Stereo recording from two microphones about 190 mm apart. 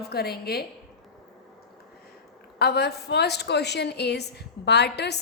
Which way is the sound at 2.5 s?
60° left (ahead or behind).